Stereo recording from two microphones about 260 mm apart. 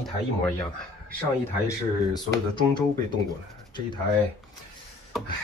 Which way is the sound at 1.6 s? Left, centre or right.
Centre.